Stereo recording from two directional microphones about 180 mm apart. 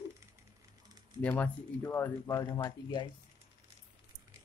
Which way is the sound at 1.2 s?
10° left (ahead or behind).